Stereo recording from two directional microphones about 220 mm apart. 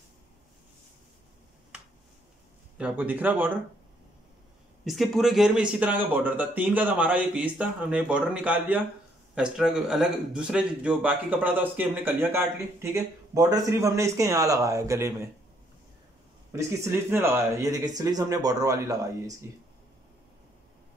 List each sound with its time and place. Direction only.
2.8 s a man's voice: 10° right (ahead or behind)
4.8 s a man's voice: centre (ahead or behind)
16.8 s a man's voice: 10° right (ahead or behind)